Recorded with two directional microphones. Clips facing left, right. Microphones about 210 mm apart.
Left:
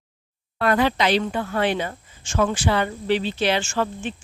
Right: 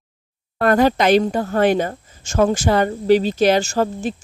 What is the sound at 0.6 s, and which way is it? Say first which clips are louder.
A woman's voice: right 5 dB; 45° right (ahead or behind).